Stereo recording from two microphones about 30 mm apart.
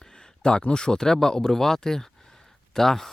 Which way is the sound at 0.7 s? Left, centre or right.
Left.